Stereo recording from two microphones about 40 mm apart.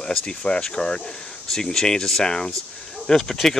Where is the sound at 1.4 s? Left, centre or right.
Centre.